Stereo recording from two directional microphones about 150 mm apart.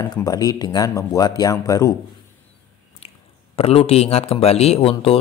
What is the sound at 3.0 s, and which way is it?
Speech, 40° left (ahead or behind).